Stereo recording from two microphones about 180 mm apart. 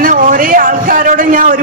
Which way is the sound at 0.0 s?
50° right (ahead or behind).